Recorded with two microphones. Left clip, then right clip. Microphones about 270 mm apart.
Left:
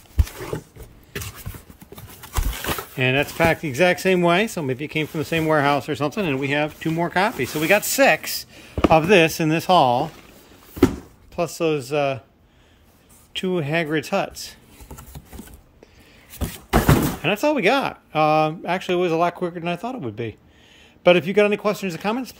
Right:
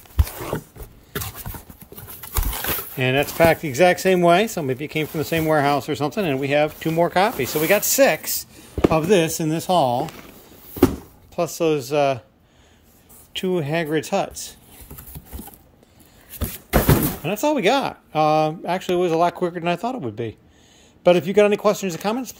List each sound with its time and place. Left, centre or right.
0.5 s a sound: centre
2.6 s a sound: left
3.0 s speech: centre
11.3 s speech: centre
13.3 s speech: centre
17.2 s speech: centre